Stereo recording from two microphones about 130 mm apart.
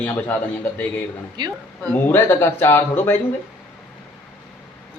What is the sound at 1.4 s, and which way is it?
Speech, 35° right (ahead or behind).